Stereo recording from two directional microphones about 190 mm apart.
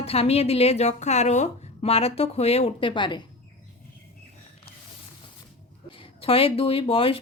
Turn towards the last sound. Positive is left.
turn(degrees=30)  # may be behind; listen again after turning